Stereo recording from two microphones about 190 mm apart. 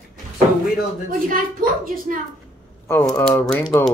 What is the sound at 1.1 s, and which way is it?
A woman's voice, 50° right (ahead or behind).